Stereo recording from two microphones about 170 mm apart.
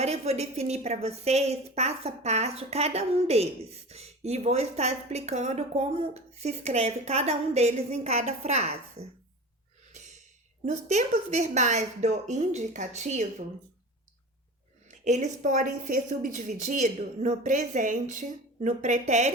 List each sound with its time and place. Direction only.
0.0 s a woman's voice: 40° right (ahead or behind)
9.9 s a sound: 45° right (ahead or behind)
10.7 s a woman's voice: 40° right (ahead or behind)
14.8 s a woman's voice: 45° right (ahead or behind)